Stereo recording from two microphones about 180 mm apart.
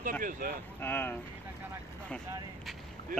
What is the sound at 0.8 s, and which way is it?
Speech, 10° left (ahead or behind).